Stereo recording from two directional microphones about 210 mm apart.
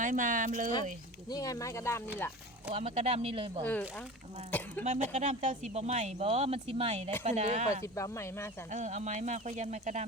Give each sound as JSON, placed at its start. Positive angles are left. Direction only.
{"t": 0.0, "sound": "speech", "side_deg": -40}
{"t": 1.3, "sound": "speech", "side_deg": 15}
{"t": 2.7, "sound": "speech", "side_deg": -30}
{"t": 3.6, "sound": "speech", "side_deg": 10}
{"t": 4.8, "sound": "speech", "side_deg": -35}
{"t": 7.9, "sound": "speech", "side_deg": 15}
{"t": 8.7, "sound": "speech", "side_deg": -35}